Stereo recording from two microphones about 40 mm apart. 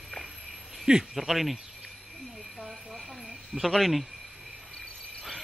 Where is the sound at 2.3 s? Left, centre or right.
Centre.